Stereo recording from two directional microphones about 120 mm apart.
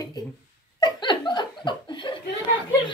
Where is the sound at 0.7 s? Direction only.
35° left (ahead or behind).